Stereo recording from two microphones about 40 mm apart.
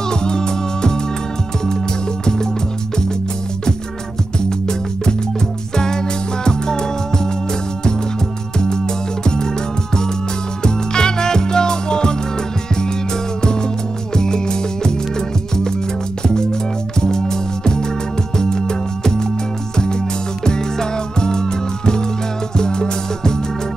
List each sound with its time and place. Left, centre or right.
0.1 s music: centre
4.4 s music: centre
8.5 s music: centre
10.6 s music: centre
13.4 s music: centre
17.0 s music: centre
20.4 s music: centre